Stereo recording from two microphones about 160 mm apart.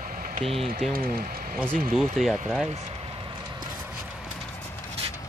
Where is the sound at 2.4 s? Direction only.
Centre (ahead or behind).